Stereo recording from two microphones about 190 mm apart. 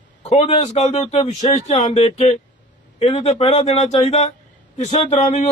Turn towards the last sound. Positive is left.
turn(degrees=35)  # may be behind; listen again after turning